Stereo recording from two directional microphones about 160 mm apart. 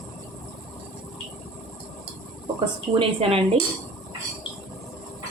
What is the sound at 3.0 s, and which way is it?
Speech, 35° right (ahead or behind).